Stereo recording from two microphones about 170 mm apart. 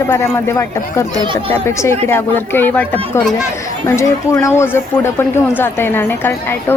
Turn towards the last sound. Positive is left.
turn(degrees=10)  # may be behind; listen again after turning